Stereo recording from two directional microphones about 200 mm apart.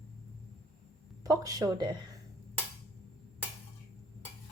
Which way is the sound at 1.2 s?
20° right (ahead or behind).